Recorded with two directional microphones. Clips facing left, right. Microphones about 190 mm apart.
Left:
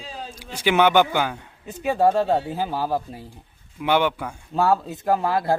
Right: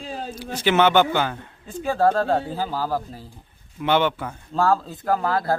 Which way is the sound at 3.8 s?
10° left (ahead or behind).